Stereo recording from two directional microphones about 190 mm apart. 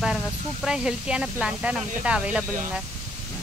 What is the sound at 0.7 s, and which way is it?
Speech, 5° right (ahead or behind).